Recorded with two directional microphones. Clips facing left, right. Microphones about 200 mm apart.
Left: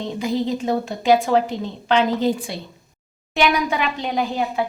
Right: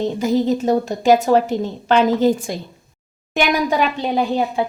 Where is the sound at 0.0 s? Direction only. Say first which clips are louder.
Right 5 dB; 45° right (ahead or behind).